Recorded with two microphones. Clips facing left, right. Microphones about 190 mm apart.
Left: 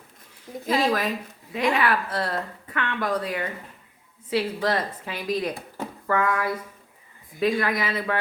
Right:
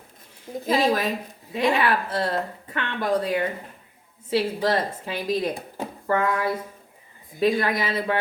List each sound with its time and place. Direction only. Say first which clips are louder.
0.7 s a woman's voice: right 1 dB; 25° right (ahead or behind)